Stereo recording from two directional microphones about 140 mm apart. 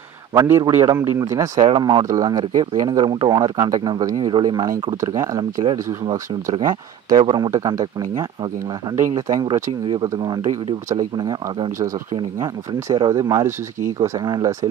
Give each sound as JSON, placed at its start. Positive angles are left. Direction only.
{"t": 0.3, "sound": "speech", "side_deg": -25}
{"t": 1.6, "sound": "speech", "side_deg": -30}